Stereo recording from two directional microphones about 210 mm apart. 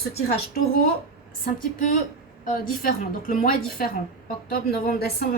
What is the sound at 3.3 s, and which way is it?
A woman's voice, 40° left (ahead or behind).